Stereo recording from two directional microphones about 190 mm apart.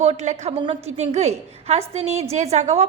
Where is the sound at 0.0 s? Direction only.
35° right (ahead or behind).